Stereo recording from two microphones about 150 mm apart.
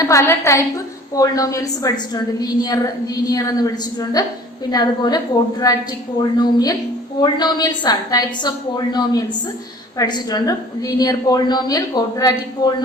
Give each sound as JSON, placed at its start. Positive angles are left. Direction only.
{"t": 0.0, "sound": "a woman's voice", "side_deg": 20}